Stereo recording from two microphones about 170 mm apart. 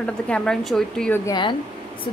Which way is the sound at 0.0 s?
5° left (ahead or behind).